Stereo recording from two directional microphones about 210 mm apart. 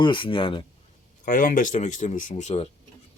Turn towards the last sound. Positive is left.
turn(degrees=35)  # may be behind; listen again after turning